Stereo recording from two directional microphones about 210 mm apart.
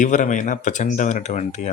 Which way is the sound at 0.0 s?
35° left (ahead or behind).